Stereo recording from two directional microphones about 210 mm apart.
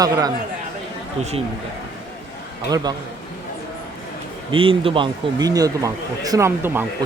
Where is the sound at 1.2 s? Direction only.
30° right (ahead or behind).